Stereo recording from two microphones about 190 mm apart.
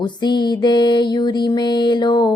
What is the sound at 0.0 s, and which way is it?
Music, 25° left (ahead or behind).